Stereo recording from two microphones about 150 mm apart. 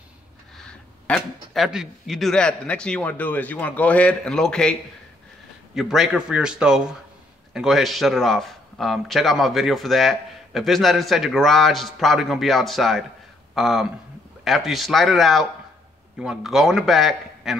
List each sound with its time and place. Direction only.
0.6 s a man's voice: 5° left (ahead or behind)
5.8 s a man's voice: centre (ahead or behind)